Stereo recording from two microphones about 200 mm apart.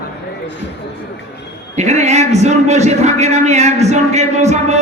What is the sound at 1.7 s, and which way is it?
A man's voice, 35° right (ahead or behind).